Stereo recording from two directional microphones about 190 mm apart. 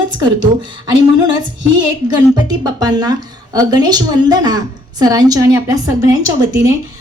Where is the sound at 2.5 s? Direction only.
20° right (ahead or behind).